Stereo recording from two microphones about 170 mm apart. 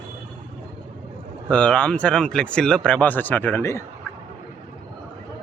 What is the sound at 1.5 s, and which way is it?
Speech, 5° left (ahead or behind).